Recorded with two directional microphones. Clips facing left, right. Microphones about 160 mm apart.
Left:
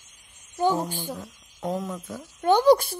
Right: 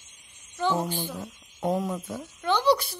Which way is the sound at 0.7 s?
15° left (ahead or behind).